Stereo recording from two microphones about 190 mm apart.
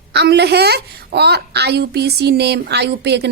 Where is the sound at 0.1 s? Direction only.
60° right (ahead or behind).